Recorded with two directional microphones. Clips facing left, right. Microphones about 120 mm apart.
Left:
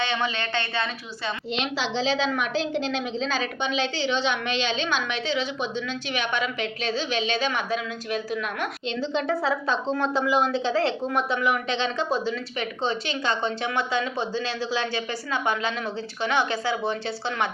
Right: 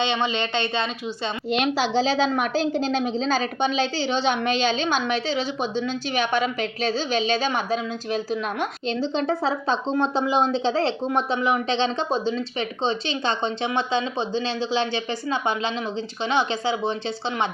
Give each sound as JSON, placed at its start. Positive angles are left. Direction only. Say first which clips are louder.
{"t": 0.0, "sound": "a woman's voice", "louder": "right 3 dB", "side_deg": -20}
{"t": 1.5, "sound": "a woman's voice", "louder": "right 7 dB", "side_deg": -45}